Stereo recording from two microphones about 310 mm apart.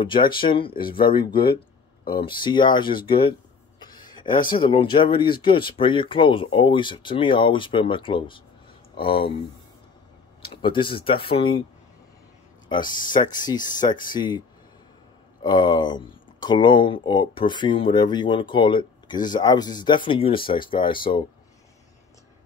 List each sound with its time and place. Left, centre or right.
0.0 s speech: centre
3.8 s a sound: centre
4.5 s speech: centre
10.4 s speech: centre
12.6 s speech: centre
15.4 s speech: centre